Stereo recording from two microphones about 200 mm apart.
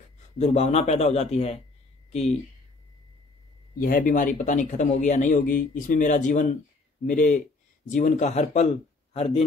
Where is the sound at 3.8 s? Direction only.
45° left (ahead or behind).